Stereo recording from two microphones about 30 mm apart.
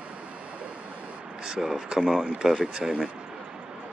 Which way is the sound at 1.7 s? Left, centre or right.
Right.